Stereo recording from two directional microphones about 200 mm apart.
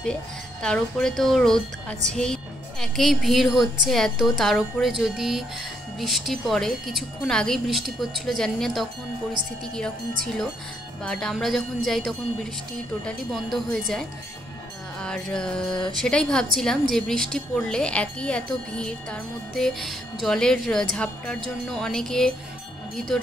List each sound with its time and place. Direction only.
0.0 s speech: 5° left (ahead or behind)
10.2 s speech: 5° left (ahead or behind)